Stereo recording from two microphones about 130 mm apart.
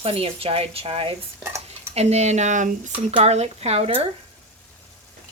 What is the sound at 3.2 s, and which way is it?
Speech, 55° right (ahead or behind).